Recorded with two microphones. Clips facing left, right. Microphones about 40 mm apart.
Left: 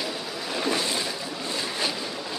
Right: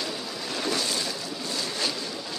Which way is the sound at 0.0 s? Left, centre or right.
Centre.